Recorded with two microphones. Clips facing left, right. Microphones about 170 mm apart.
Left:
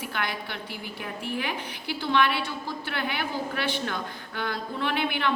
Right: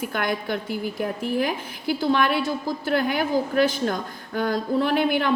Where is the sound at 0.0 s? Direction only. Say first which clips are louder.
Right 6 dB; 45° right (ahead or behind).